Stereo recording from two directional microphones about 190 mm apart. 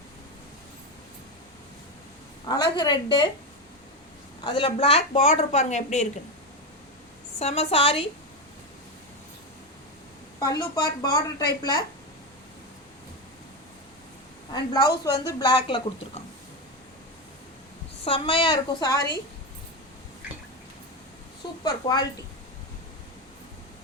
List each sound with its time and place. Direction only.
2.5 s speech: 20° left (ahead or behind)
4.4 s speech: 25° left (ahead or behind)
7.3 s speech: 30° left (ahead or behind)
10.4 s speech: 20° left (ahead or behind)
14.5 s speech: 20° left (ahead or behind)
18.0 s speech: 30° left (ahead or behind)
21.4 s a sound: 25° left (ahead or behind)
21.8 s speech: 25° left (ahead or behind)